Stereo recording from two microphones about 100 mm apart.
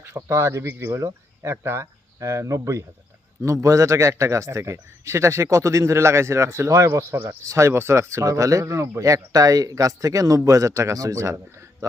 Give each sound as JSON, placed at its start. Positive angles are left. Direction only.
{"t": 0.0, "sound": "speech", "side_deg": -30}
{"t": 7.1, "sound": "a man's voice", "side_deg": -20}